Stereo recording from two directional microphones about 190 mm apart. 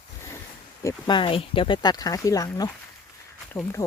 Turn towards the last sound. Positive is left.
turn(degrees=10)  # may be behind; listen again after turning